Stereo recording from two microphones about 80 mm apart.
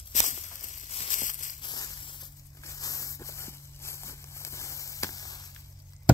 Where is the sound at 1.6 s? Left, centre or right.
Left.